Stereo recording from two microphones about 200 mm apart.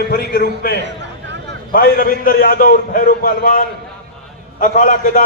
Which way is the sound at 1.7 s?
45° left (ahead or behind).